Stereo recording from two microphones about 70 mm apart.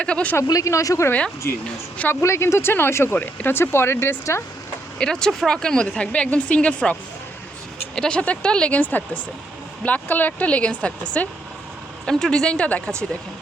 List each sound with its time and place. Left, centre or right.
0.0 s speech: centre
0.6 s speech: left
2.2 s speech: left
4.9 s speech: centre
7.9 s speech: centre